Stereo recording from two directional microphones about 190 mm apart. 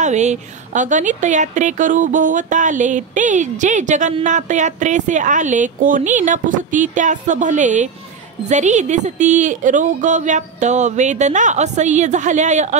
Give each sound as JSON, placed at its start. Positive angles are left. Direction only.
{"t": 0.0, "sound": "a woman's voice", "side_deg": -35}